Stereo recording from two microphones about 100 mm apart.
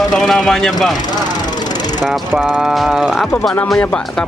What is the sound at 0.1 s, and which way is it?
Speech, 5° left (ahead or behind).